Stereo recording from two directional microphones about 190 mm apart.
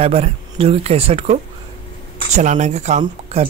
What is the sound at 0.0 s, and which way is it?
Speech, 30° right (ahead or behind).